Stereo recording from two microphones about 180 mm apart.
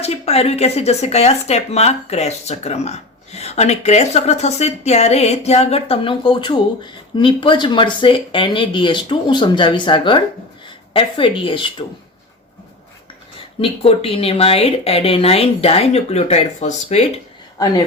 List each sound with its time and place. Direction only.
0.0 s speech: 35° left (ahead or behind)
13.6 s speech: 30° left (ahead or behind)
17.6 s speech: 20° left (ahead or behind)